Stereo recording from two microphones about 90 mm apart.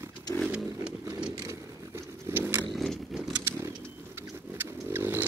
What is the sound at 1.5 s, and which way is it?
Zipper, 30° right (ahead or behind).